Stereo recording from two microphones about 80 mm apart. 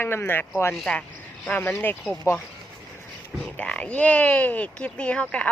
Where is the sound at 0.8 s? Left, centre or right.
Centre.